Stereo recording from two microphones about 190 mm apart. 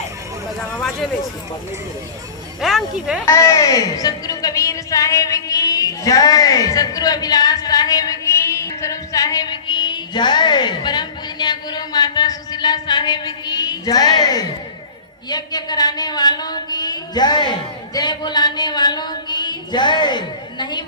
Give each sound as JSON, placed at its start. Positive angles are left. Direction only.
{"t": 2.6, "sound": "speech", "side_deg": 0}
{"t": 3.2, "sound": "speech", "side_deg": 15}